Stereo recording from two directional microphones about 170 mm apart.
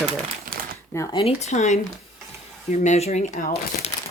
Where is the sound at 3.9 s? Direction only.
20° left (ahead or behind).